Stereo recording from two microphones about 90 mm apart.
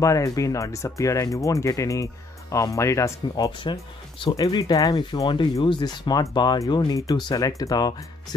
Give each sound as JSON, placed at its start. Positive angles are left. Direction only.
{"t": 0.0, "sound": "speech", "side_deg": 35}
{"t": 4.4, "sound": "speech", "side_deg": 50}
{"t": 5.6, "sound": "speech", "side_deg": 60}